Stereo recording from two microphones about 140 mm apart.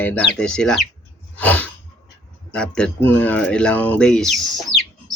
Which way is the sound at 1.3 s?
10° left (ahead or behind).